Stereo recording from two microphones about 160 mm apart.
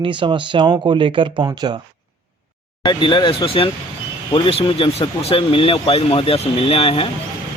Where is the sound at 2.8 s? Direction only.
30° left (ahead or behind).